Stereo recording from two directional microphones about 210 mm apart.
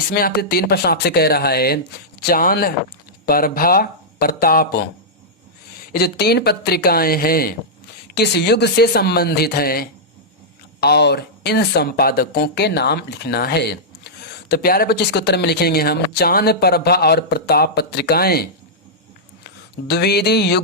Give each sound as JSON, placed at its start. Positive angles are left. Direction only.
{"t": 0.1, "sound": "speech", "side_deg": 45}
{"t": 5.9, "sound": "speech", "side_deg": 50}
{"t": 19.9, "sound": "speech", "side_deg": 50}